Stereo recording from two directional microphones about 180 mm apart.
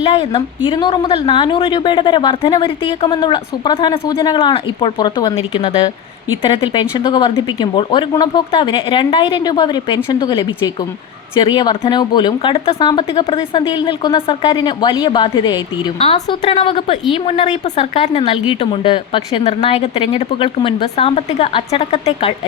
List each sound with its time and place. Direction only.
0.0 s a woman's voice: 30° left (ahead or behind)